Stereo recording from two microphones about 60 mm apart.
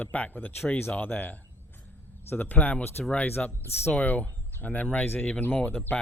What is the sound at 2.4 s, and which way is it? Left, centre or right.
Speech, left.